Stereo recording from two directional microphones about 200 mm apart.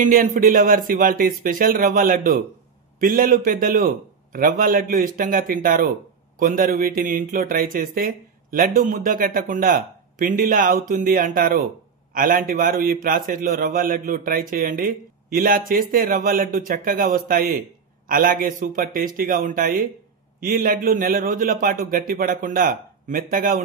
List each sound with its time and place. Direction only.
0.0 s a man's voice: 40° right (ahead or behind)